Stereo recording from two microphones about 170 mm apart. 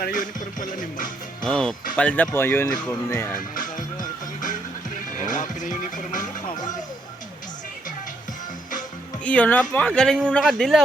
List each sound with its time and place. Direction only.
0.0 s music: 50° left (ahead or behind)
1.4 s a man's voice: 5° left (ahead or behind)
3.5 s music: 50° left (ahead or behind)
9.2 s a man's voice: 10° left (ahead or behind)